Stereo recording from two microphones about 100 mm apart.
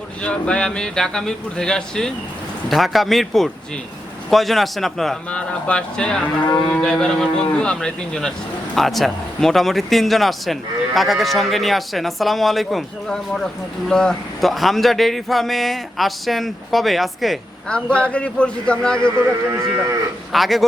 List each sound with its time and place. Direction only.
0.2 s speech: 10° left (ahead or behind)
19.5 s livestock: 30° right (ahead or behind)
20.3 s speech: centre (ahead or behind)